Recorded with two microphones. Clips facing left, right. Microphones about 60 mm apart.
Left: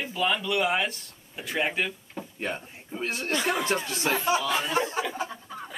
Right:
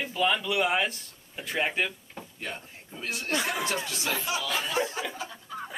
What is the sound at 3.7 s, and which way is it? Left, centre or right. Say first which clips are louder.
Speech: left 4 dB; left.